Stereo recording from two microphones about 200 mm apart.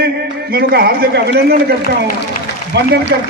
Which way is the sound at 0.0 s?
50° right (ahead or behind).